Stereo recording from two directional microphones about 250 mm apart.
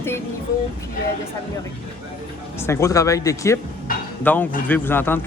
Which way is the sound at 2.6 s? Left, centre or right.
Centre.